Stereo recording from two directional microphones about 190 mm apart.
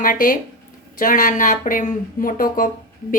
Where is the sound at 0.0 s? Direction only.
45° left (ahead or behind).